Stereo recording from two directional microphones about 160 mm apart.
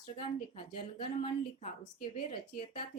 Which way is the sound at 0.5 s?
30° left (ahead or behind).